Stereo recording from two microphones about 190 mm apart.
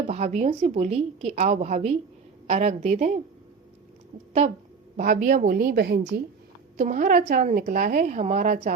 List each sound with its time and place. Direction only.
0.1 s a woman's voice: 35° right (ahead or behind)
4.9 s a woman's voice: 45° right (ahead or behind)
6.7 s a woman's voice: 40° right (ahead or behind)